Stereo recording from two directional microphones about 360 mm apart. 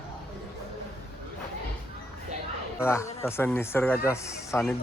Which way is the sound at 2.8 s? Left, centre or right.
Centre.